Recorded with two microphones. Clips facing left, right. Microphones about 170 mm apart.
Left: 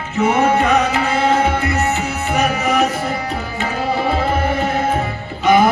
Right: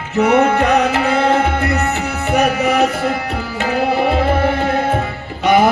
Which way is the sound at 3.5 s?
65° right (ahead or behind).